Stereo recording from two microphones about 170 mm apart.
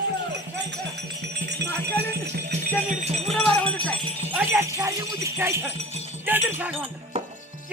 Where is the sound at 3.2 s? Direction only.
5° left (ahead or behind).